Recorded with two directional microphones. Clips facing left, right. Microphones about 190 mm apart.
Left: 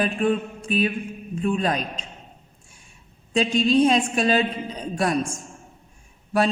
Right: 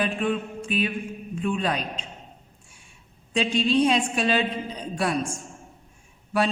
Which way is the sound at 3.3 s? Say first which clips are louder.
Left 3 dB; 45° left (ahead or behind).